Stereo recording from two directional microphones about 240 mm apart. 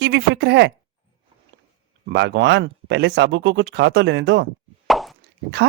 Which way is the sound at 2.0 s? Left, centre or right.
Right.